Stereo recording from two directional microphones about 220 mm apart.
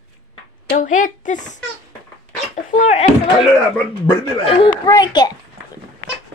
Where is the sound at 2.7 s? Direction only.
35° left (ahead or behind).